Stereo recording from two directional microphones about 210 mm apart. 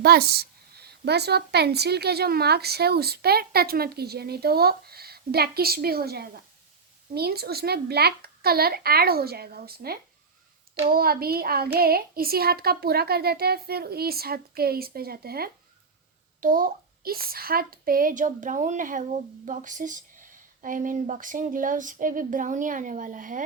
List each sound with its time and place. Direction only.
0.0 s speech: 50° right (ahead or behind)